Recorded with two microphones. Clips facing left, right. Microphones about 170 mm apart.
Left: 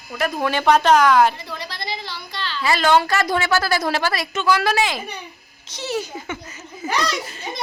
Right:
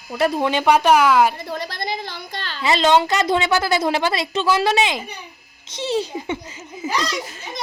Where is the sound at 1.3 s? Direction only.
50° right (ahead or behind).